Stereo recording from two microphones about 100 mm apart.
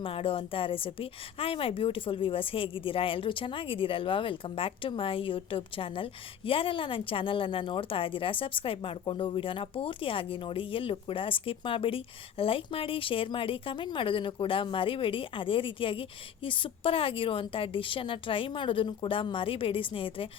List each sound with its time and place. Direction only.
0.0 s a woman's voice: 65° left (ahead or behind)